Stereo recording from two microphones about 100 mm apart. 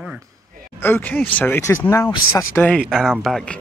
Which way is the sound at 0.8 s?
20° left (ahead or behind).